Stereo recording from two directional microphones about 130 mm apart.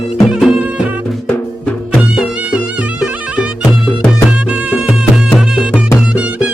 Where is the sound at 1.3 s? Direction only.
10° left (ahead or behind).